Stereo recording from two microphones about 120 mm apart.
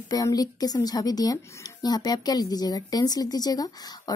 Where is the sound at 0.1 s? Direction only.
30° left (ahead or behind).